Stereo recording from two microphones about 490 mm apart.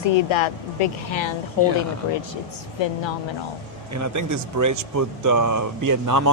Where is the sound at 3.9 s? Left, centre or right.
Right.